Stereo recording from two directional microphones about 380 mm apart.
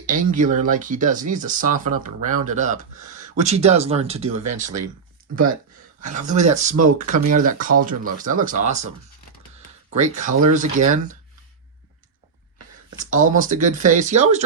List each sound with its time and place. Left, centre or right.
0.0 s speech: right
5.3 s speech: right
6.0 s speech: centre
10.0 s speech: centre
13.1 s speech: centre